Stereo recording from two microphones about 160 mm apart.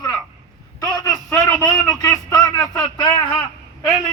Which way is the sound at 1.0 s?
20° left (ahead or behind).